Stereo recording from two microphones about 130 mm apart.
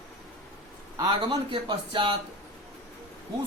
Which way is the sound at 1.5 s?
40° right (ahead or behind).